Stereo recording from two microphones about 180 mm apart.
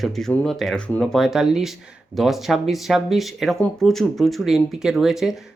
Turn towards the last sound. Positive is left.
turn(degrees=0)  # may be behind; listen again after turning